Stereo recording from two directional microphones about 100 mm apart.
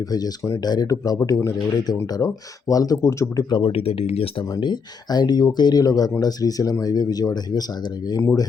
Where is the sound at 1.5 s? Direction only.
45° left (ahead or behind).